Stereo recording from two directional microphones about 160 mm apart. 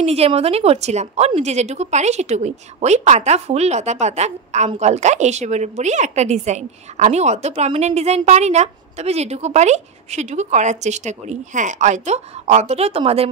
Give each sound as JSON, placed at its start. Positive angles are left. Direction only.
{"t": 0.0, "sound": "a woman's voice", "side_deg": -40}